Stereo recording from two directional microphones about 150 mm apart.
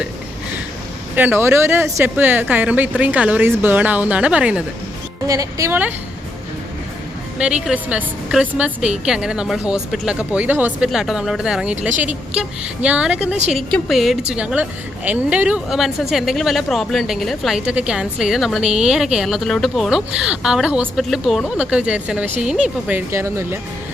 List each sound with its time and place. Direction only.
1.1 s a woman's voice: 10° right (ahead or behind)
5.3 s a woman's voice: 20° right (ahead or behind)
7.3 s a woman's voice: 5° right (ahead or behind)